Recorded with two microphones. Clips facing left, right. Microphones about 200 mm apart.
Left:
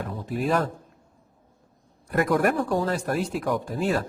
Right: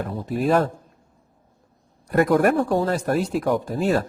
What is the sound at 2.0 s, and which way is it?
Speech, 45° right (ahead or behind).